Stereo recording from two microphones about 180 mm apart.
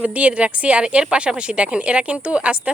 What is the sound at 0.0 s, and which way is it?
Speech, 5° right (ahead or behind).